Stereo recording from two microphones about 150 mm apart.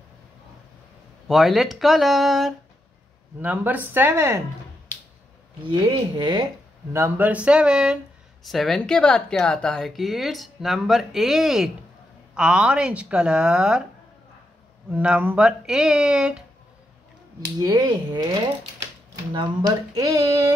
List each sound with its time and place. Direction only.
1.2 s a woman's voice: centre (ahead or behind)
3.3 s speech: 10° right (ahead or behind)
5.6 s speech: 30° right (ahead or behind)
6.9 s a woman's voice: 15° right (ahead or behind)
14.9 s a woman's voice: 10° right (ahead or behind)
17.6 s speech: 30° right (ahead or behind)
19.3 s speech: 25° right (ahead or behind)